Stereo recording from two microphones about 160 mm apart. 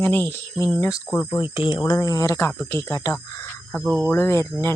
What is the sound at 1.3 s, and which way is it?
Speech, 30° left (ahead or behind).